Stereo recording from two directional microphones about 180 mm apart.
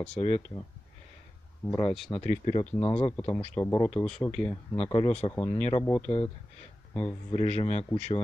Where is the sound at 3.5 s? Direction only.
15° left (ahead or behind).